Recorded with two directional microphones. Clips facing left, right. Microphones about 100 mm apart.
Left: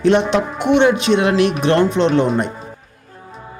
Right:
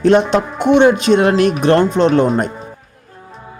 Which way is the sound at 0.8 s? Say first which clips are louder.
Right 4 dB; 40° right (ahead or behind).